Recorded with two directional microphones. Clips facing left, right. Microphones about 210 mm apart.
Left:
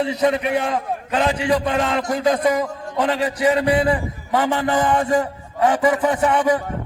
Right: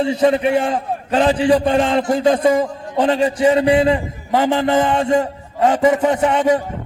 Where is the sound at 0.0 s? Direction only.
30° right (ahead or behind).